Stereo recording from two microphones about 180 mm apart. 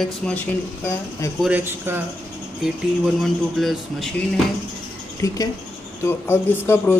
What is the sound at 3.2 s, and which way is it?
Speech, centre (ahead or behind).